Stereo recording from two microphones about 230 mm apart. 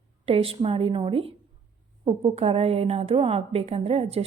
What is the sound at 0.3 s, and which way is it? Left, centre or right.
A woman's voice, right.